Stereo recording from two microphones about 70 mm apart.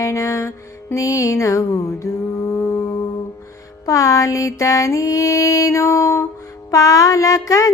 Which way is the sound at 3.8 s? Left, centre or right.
Left.